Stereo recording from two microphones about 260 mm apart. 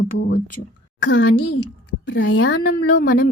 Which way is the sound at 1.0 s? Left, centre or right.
Left.